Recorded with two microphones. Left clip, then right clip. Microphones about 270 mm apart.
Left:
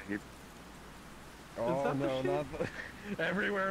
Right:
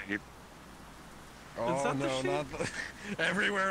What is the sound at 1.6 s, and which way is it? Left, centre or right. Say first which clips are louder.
Speech: right 1 dB; right.